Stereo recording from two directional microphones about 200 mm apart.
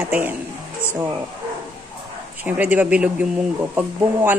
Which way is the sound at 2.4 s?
10° right (ahead or behind).